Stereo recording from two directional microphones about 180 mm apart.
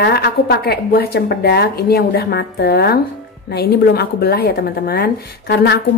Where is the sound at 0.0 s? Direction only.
65° left (ahead or behind).